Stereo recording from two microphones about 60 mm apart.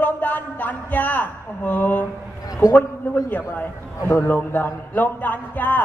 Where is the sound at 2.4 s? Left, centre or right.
Left.